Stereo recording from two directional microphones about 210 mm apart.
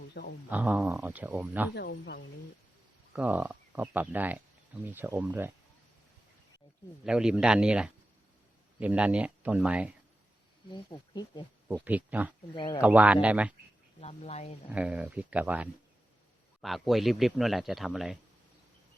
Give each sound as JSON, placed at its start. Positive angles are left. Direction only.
{"t": 0.1, "sound": "speech", "side_deg": 50}
{"t": 0.5, "sound": "speech", "side_deg": -5}
{"t": 1.7, "sound": "speech", "side_deg": 50}
{"t": 3.1, "sound": "speech", "side_deg": -5}
{"t": 7.0, "sound": "speech", "side_deg": -5}
{"t": 10.8, "sound": "speech", "side_deg": 20}
{"t": 11.7, "sound": "speech", "side_deg": -10}
{"t": 12.5, "sound": "speech", "side_deg": 25}
{"t": 12.8, "sound": "speech", "side_deg": -5}
{"t": 14.0, "sound": "speech", "side_deg": 30}
{"t": 14.7, "sound": "speech", "side_deg": -5}